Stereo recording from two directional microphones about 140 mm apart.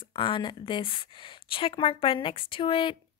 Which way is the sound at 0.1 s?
35° left (ahead or behind).